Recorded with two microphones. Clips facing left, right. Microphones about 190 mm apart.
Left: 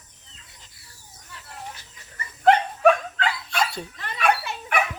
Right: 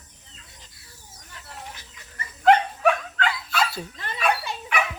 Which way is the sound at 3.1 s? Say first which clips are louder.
Right 1 dB; 25° left (ahead or behind).